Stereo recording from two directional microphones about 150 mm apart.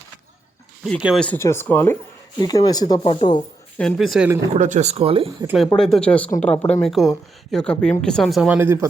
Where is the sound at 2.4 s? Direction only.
25° left (ahead or behind).